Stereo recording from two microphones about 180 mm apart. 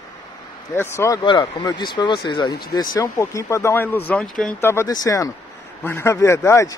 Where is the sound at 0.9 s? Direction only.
15° left (ahead or behind).